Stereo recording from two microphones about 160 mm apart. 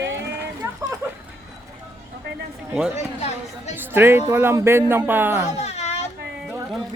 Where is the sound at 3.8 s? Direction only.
15° right (ahead or behind).